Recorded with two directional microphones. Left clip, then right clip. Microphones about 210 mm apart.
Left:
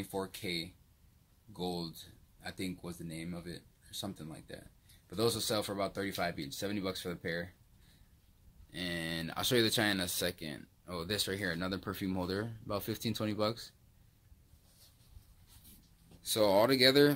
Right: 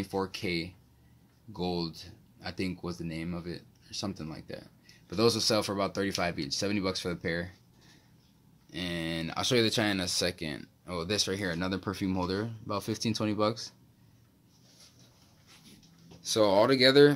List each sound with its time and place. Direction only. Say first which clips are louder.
0.0 s speech: right 6 dB; 5° right (ahead or behind)
8.7 s speech: right 4 dB; centre (ahead or behind)
16.3 s speech: right 4 dB; 5° left (ahead or behind)